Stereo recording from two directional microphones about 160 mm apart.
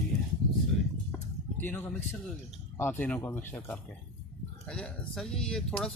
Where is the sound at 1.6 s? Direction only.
10° left (ahead or behind).